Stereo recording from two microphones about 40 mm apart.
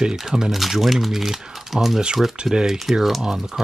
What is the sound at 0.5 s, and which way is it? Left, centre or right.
Speech, centre.